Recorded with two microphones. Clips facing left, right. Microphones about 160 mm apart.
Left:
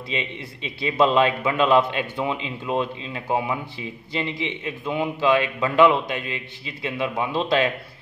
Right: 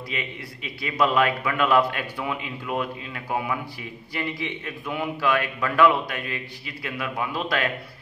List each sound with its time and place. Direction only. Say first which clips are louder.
0.1 s a man's voice: left 6 dB; 25° left (ahead or behind)